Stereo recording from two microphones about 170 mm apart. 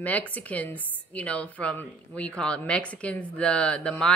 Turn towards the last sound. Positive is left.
turn(degrees=5)  # may be behind; listen again after turning